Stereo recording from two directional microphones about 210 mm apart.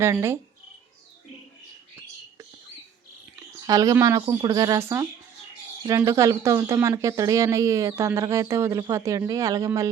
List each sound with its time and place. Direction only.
0.0 s speech: 10° right (ahead or behind)
3.5 s speech: 15° right (ahead or behind)